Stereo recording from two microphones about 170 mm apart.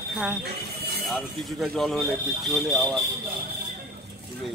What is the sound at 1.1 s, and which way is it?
Speech, centre (ahead or behind).